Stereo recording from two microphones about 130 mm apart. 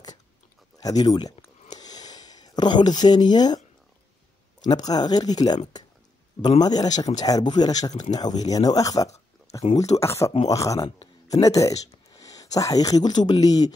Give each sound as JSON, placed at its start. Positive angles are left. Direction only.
{"t": 0.8, "sound": "speech", "side_deg": 30}
{"t": 1.8, "sound": "a sound", "side_deg": 30}
{"t": 4.6, "sound": "speech", "side_deg": 30}
{"t": 6.6, "sound": "speech", "side_deg": 30}